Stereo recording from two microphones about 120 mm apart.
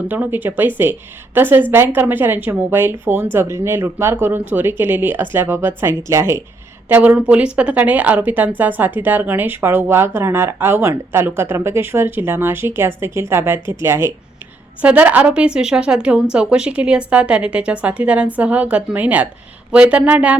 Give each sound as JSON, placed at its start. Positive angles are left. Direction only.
{"t": 0.1, "sound": "a woman's voice", "side_deg": -15}